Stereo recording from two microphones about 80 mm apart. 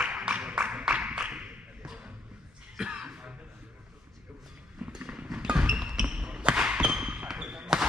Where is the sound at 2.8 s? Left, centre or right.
Centre.